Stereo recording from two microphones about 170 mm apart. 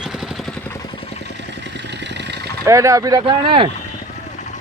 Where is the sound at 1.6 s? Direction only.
90° right.